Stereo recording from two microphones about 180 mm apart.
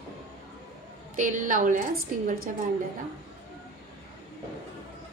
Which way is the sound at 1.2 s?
45° right (ahead or behind).